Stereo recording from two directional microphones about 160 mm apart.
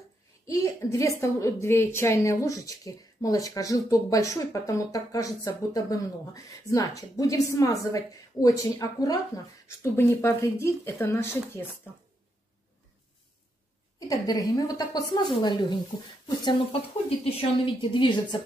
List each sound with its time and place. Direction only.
0.5 s a woman's voice: 20° left (ahead or behind)
13.9 s a woman's voice: 20° left (ahead or behind)
17.2 s a woman's voice: 30° left (ahead or behind)